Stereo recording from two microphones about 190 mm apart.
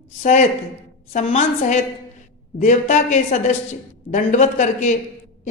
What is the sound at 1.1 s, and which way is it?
A woman's voice, 35° left (ahead or behind).